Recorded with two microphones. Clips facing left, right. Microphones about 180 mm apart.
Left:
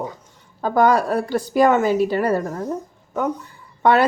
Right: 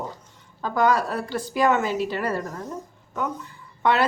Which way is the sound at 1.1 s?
45° left (ahead or behind).